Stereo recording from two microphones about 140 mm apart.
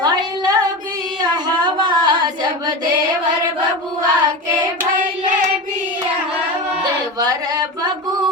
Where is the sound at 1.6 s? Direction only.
35° right (ahead or behind).